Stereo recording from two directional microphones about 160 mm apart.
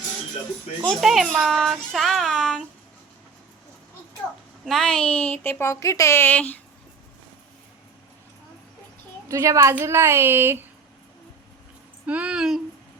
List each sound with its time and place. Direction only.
0.9 s speech: centre (ahead or behind)
4.6 s a woman's voice: centre (ahead or behind)
9.3 s a woman's voice: 15° right (ahead or behind)
12.0 s speech: 10° right (ahead or behind)